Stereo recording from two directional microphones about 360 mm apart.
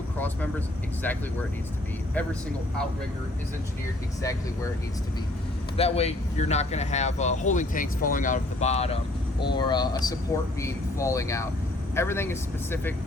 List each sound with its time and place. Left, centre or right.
1.0 s speech: centre
5.7 s speech: centre